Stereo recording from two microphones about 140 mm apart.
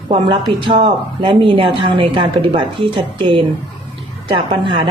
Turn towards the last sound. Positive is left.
turn(degrees=-35)  # may be behind; listen again after turning